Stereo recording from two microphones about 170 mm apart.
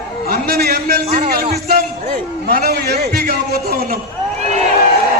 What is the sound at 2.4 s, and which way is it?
A man's voice, 70° right (ahead or behind).